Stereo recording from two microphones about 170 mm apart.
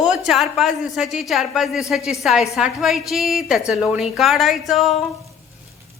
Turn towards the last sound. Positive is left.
turn(degrees=0)  # may be behind; listen again after turning